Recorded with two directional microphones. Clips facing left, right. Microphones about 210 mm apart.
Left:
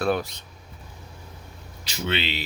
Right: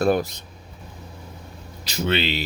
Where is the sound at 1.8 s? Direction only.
40° right (ahead or behind).